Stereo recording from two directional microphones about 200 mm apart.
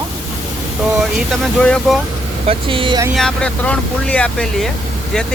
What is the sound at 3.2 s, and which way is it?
Speech, 5° left (ahead or behind).